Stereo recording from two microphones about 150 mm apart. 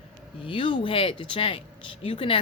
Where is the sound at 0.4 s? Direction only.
35° left (ahead or behind).